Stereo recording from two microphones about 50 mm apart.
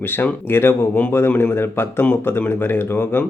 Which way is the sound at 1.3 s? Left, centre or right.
Left.